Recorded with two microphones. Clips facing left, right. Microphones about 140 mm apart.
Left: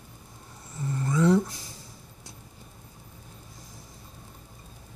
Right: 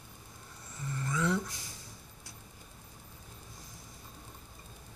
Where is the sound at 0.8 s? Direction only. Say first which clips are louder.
Left 9 dB; 30° left (ahead or behind).